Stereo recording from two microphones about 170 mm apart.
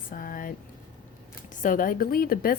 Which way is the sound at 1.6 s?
55° left (ahead or behind).